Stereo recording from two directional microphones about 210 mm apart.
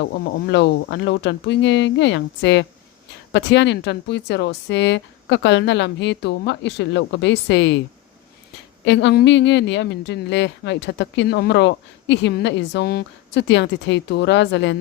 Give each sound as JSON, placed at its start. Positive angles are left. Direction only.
{"t": 0.0, "sound": "a woman's voice", "side_deg": 60}
{"t": 8.8, "sound": "a woman's voice", "side_deg": 55}